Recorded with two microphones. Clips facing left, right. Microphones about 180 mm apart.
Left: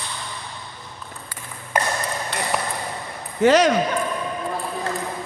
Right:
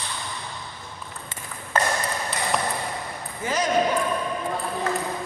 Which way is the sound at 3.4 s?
75° left (ahead or behind).